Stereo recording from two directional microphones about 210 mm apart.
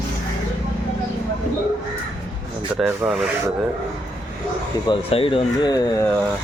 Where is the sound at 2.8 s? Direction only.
5° right (ahead or behind).